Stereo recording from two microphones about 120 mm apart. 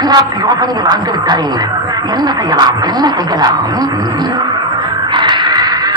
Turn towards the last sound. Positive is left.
turn(degrees=-40)  # may be behind; listen again after turning